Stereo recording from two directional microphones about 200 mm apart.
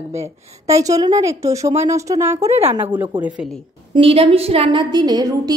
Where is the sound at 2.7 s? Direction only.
25° right (ahead or behind).